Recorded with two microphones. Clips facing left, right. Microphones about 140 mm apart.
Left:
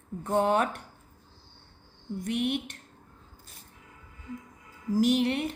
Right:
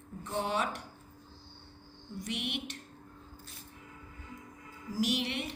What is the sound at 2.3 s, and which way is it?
Speech, 45° left (ahead or behind).